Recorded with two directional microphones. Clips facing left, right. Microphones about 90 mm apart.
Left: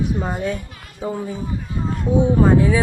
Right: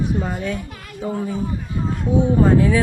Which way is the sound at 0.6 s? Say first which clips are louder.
Right 6 dB; 60° right (ahead or behind).